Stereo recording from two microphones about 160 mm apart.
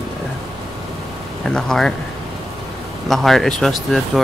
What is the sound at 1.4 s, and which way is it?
Speech, 5° left (ahead or behind).